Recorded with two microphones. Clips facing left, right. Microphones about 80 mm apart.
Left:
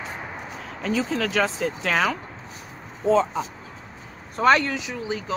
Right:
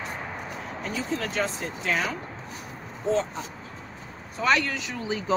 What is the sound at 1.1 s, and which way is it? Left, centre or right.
Speech, left.